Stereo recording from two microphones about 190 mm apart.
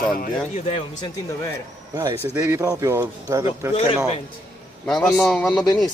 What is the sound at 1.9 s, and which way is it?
Speech, 15° right (ahead or behind).